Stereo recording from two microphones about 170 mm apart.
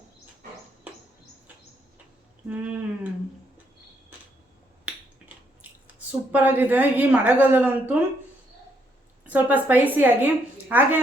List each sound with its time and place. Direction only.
2.5 s a sound: 10° right (ahead or behind)
5.2 s squish: 5° right (ahead or behind)
6.1 s a woman's voice: 10° right (ahead or behind)
9.2 s a woman's voice: 10° right (ahead or behind)